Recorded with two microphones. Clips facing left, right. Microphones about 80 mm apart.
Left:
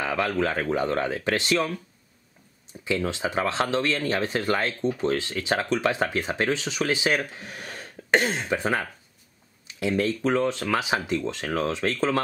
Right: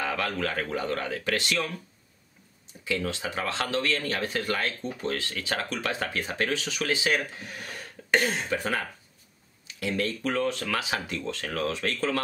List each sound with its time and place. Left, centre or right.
0.0 s speech: left
2.8 s speech: left